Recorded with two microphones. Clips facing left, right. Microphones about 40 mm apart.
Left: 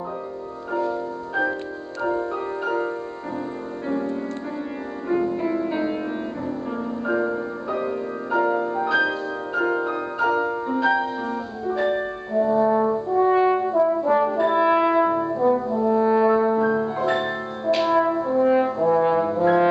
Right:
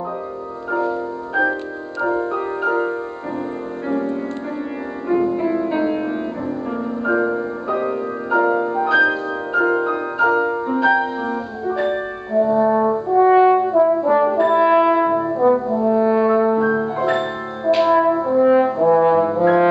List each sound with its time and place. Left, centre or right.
0.7 s music: centre
2.0 s music: right
2.6 s music: centre
3.9 s music: right
5.1 s music: centre
13.4 s brass instrument: centre